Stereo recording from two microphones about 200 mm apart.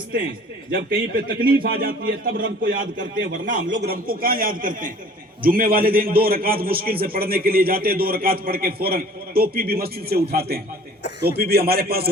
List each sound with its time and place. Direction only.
0.7 s a man's voice: 50° right (ahead or behind)